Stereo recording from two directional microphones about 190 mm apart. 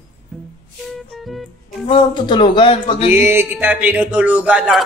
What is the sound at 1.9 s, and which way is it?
Speech, 25° left (ahead or behind).